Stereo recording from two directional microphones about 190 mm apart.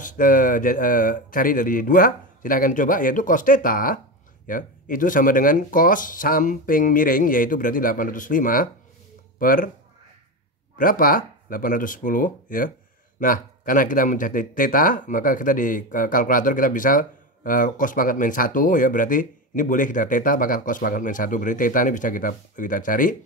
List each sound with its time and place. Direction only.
0.0 s speech: 45° left (ahead or behind)
10.8 s speech: 50° left (ahead or behind)